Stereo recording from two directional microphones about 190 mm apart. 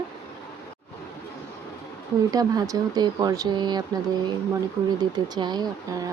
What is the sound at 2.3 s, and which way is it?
Speech, 20° right (ahead or behind).